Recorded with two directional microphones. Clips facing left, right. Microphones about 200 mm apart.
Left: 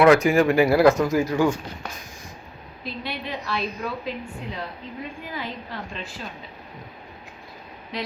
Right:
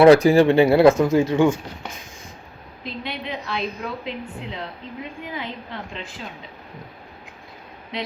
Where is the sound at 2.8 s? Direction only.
20° right (ahead or behind).